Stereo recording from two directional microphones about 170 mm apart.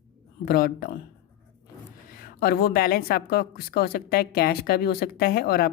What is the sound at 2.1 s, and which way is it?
Speech, 60° left (ahead or behind).